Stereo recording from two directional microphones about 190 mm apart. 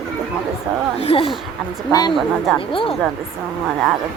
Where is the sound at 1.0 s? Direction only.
30° left (ahead or behind).